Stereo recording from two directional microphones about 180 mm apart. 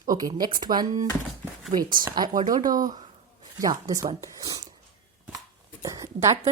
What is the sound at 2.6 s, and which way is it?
Speech, 50° right (ahead or behind).